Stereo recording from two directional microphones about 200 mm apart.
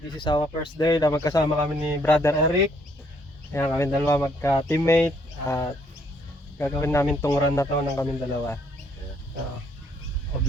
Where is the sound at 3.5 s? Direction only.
10° left (ahead or behind).